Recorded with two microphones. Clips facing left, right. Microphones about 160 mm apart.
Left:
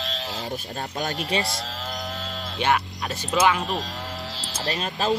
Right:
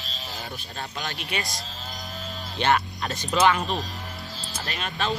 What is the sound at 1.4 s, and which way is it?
Cattle, 80° left.